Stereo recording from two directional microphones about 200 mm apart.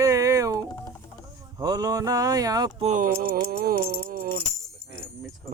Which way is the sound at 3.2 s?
50° right (ahead or behind).